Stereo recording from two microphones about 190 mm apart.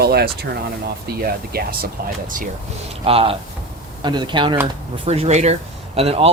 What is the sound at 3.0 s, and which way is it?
Speech, 30° right (ahead or behind).